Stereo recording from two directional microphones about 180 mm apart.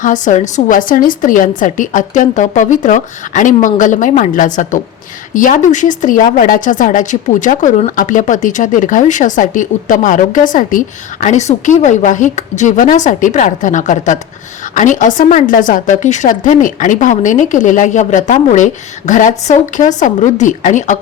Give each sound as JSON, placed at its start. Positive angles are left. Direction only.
{"t": 0.0, "sound": "a woman's voice", "side_deg": 45}